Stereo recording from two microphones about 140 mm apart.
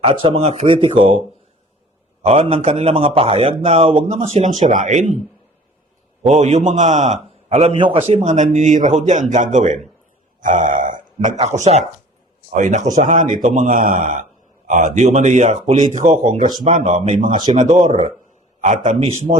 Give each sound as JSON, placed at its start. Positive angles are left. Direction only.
{"t": 0.0, "sound": "speech", "side_deg": -40}
{"t": 2.2, "sound": "a man's voice", "side_deg": -45}
{"t": 6.2, "sound": "speech", "side_deg": -60}
{"t": 11.3, "sound": "a man's voice", "side_deg": -55}
{"t": 16.5, "sound": "speech", "side_deg": -30}
{"t": 18.6, "sound": "a man's voice", "side_deg": -60}